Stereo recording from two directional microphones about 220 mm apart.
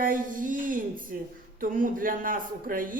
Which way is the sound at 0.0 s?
40° right (ahead or behind).